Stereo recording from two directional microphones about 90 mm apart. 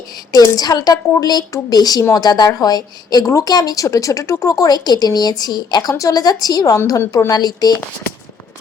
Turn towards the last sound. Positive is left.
turn(degrees=50)  # may be behind; listen again after turning